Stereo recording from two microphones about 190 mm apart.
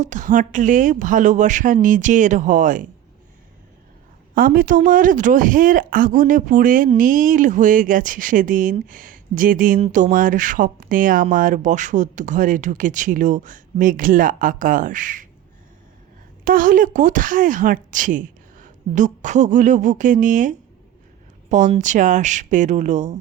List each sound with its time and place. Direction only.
0.0 s speech: 40° right (ahead or behind)
4.4 s speech: 45° right (ahead or behind)
16.4 s speech: 45° right (ahead or behind)
21.8 s speech: 40° right (ahead or behind)